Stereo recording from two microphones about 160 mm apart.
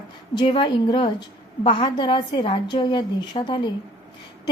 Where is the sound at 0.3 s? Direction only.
30° left (ahead or behind).